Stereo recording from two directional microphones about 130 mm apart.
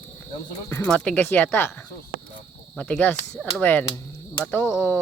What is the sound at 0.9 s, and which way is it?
Speech, 10° left (ahead or behind).